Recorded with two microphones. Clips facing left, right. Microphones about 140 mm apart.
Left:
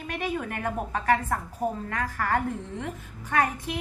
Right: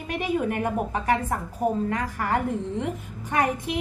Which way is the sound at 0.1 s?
15° right (ahead or behind).